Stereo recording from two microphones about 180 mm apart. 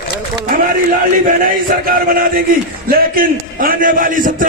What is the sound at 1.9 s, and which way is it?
A man's voice, 50° right (ahead or behind).